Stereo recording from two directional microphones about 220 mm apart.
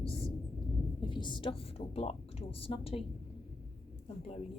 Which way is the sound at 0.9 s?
20° left (ahead or behind).